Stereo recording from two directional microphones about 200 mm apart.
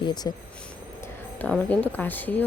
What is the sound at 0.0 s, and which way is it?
Speech, 20° left (ahead or behind).